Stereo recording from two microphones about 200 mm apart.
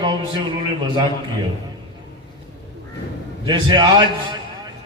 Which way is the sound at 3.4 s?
20° right (ahead or behind).